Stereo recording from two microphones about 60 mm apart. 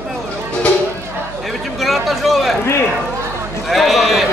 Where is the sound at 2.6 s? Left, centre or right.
Left.